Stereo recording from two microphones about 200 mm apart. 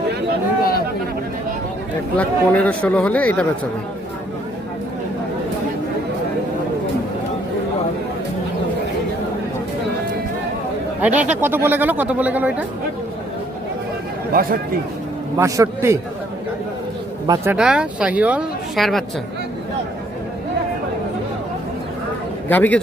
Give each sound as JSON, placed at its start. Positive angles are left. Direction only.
{"t": 2.1, "sound": "speech", "side_deg": 5}
{"t": 11.0, "sound": "speech", "side_deg": -5}
{"t": 14.3, "sound": "speech", "side_deg": -45}
{"t": 15.4, "sound": "speech", "side_deg": -15}
{"t": 17.2, "sound": "speech", "side_deg": -20}
{"t": 17.5, "sound": "speech", "side_deg": -5}
{"t": 22.4, "sound": "speech", "side_deg": 10}